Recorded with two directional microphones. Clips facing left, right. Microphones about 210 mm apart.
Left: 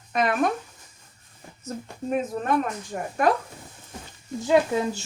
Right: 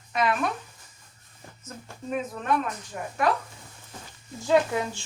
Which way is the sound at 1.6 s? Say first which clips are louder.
Left 6 dB; 40° left (ahead or behind).